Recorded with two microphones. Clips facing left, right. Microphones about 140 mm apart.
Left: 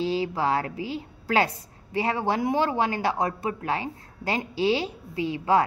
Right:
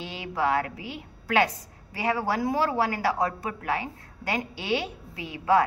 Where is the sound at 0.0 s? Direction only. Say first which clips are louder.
Left 3 dB; 30° left (ahead or behind).